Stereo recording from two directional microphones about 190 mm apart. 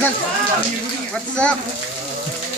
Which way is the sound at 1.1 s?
5° left (ahead or behind).